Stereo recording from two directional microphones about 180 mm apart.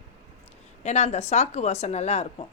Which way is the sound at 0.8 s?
40° left (ahead or behind).